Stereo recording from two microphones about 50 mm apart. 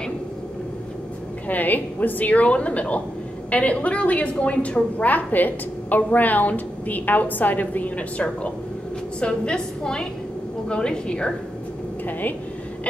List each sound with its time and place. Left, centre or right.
1.5 s a woman's voice: left
9.2 s a woman's voice: centre